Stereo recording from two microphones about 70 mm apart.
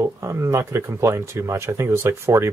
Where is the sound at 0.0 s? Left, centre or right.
Right.